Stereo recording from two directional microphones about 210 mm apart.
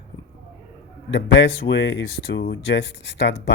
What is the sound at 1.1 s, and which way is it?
Speech, 60° left (ahead or behind).